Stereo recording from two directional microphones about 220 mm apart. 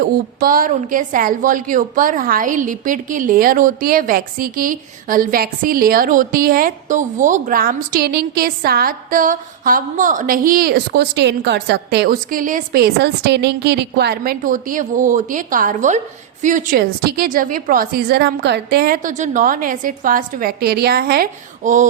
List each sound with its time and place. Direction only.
0.0 s a woman's voice: 40° right (ahead or behind)